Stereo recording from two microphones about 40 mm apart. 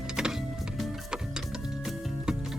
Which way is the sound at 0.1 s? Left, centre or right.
Centre.